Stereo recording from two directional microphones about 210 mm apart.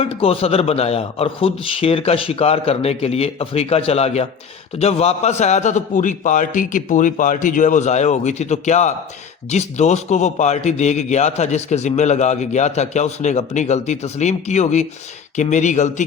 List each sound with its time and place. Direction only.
0.0 s a man's voice: 25° left (ahead or behind)